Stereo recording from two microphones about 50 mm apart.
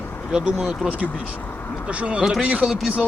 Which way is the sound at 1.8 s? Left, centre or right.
Right.